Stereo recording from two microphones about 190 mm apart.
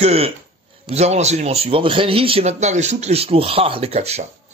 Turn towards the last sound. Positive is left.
turn(degrees=-35)  # may be behind; listen again after turning